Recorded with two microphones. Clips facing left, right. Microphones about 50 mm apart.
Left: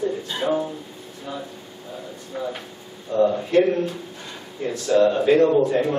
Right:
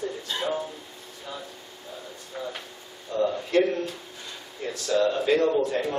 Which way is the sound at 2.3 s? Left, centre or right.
Centre.